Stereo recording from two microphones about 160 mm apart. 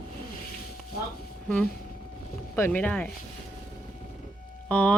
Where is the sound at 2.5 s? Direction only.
10° left (ahead or behind).